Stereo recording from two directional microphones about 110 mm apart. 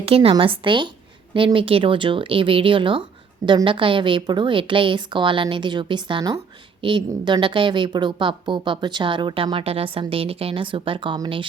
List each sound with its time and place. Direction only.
0.0 s a woman's voice: 60° right (ahead or behind)